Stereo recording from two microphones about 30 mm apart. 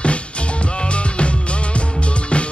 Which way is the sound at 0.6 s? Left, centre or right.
Left.